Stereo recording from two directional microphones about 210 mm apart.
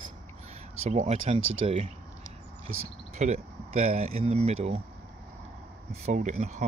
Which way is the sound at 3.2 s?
30° right (ahead or behind).